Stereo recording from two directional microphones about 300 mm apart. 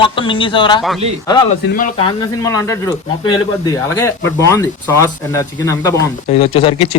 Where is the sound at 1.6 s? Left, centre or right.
Left.